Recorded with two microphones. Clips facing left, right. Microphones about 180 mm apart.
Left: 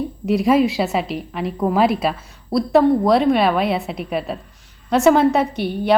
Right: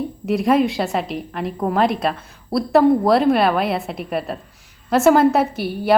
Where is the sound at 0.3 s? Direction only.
Centre (ahead or behind).